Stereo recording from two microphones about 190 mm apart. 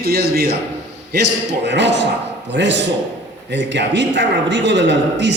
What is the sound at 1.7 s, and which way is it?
A man's voice, 65° right (ahead or behind).